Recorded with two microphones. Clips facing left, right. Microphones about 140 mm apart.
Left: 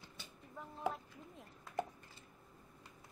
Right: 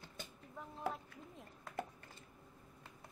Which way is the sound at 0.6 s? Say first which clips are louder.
Left 2 dB; centre (ahead or behind).